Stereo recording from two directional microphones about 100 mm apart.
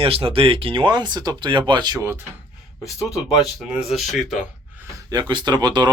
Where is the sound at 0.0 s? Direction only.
65° right (ahead or behind); by 2.0 s 50° right (ahead or behind).